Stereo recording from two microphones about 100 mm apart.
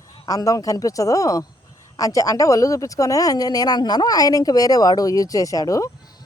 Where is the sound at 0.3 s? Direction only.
35° left (ahead or behind).